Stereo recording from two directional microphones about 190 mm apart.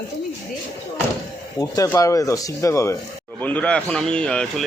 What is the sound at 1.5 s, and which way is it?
Speech, 15° left (ahead or behind).